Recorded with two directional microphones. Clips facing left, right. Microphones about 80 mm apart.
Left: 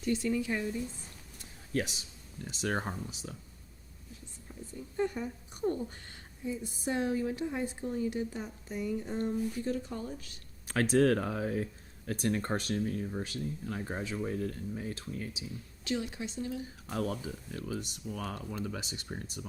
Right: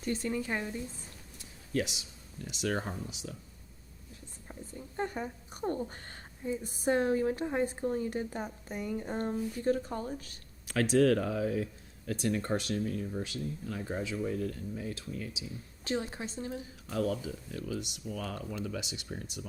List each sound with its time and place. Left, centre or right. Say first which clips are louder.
0.0 s a woman's voice: left 2 dB; right
1.4 s a sound: right 1 dB; left
2.5 s speech: even; left
4.9 s speech: left 2 dB; right
10.7 s speech: right 1 dB; left
15.8 s a woman's voice: even; right
17.7 s speech: right 1 dB; left